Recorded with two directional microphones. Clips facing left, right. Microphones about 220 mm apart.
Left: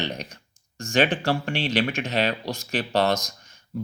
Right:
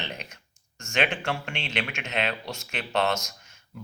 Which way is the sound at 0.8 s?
35° left (ahead or behind).